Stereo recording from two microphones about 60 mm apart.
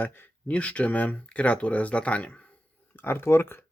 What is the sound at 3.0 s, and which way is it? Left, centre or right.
Speech, left.